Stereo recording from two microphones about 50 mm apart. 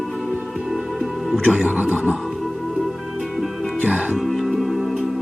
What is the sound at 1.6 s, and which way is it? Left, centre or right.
Speech, right.